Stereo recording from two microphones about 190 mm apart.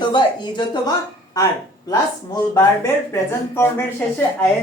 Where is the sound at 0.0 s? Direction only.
25° left (ahead or behind).